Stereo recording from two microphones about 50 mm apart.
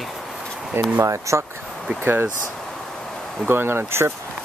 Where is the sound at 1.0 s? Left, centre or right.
Right.